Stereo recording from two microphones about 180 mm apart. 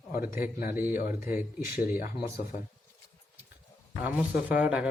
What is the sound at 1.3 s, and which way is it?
Speech, 55° left (ahead or behind).